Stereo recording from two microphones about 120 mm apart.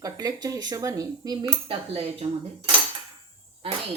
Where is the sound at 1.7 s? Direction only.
55° right (ahead or behind).